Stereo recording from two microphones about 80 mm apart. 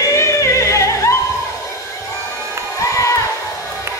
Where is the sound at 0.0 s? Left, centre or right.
Left.